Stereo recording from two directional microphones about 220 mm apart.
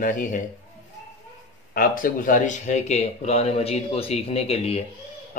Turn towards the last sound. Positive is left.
turn(degrees=25)  # may be behind; listen again after turning